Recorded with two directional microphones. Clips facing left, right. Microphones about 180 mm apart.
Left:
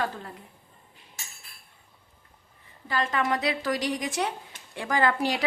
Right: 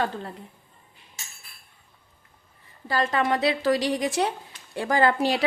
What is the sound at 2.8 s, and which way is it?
A woman's voice, 35° right (ahead or behind).